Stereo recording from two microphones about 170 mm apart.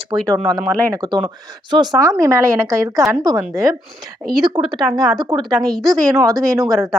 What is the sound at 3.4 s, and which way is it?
Speech, centre (ahead or behind).